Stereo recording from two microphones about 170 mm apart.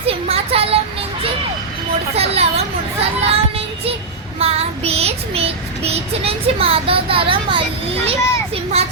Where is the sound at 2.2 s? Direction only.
35° right (ahead or behind).